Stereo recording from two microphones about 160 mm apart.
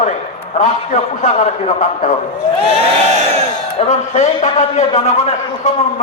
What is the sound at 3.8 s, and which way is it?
A man's voice, 45° left (ahead or behind).